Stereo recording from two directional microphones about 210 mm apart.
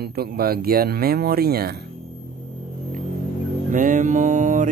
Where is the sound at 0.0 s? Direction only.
45° right (ahead or behind).